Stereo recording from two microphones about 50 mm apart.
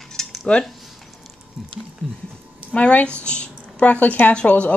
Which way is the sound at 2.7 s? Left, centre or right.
Left.